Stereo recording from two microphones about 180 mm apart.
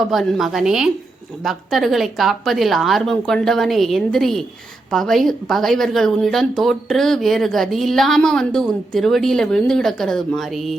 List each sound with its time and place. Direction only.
0.0 s speech: centre (ahead or behind)